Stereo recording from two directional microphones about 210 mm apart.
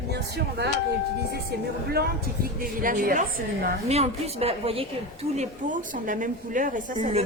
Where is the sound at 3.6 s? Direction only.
30° right (ahead or behind).